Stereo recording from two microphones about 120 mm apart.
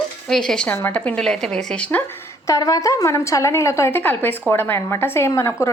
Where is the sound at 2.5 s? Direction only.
30° left (ahead or behind).